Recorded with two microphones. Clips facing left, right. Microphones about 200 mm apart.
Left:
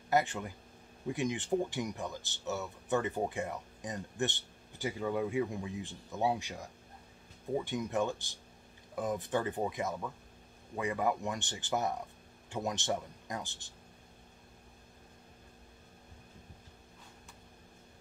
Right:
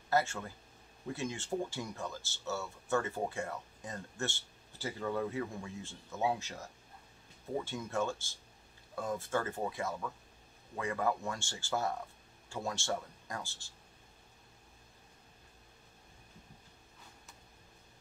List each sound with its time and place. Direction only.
0.1 s speech: 15° left (ahead or behind)